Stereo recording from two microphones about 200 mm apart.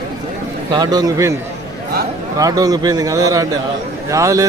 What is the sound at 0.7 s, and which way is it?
Speech, 20° right (ahead or behind).